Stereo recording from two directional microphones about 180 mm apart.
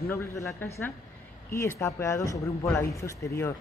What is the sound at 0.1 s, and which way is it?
A man's voice, 15° left (ahead or behind).